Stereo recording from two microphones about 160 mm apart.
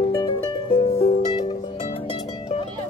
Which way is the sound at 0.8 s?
40° left (ahead or behind).